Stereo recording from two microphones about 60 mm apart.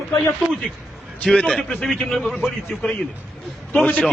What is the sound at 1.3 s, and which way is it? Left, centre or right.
A man's voice, centre.